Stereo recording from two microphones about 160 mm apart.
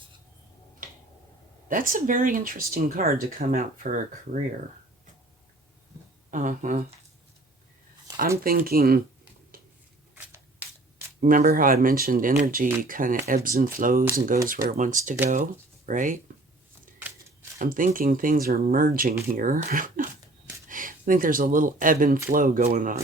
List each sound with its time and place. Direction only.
0.8 s finger snapping: 60° right (ahead or behind)
1.6 s speech: 60° right (ahead or behind)
6.3 s speech: 55° right (ahead or behind)
8.4 s speech: 70° right (ahead or behind)
10.2 s a sound: 10° right (ahead or behind)
11.2 s speech: 60° right (ahead or behind)
17.6 s speech: 60° right (ahead or behind)